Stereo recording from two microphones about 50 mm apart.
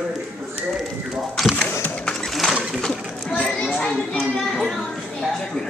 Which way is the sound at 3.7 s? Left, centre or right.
Centre.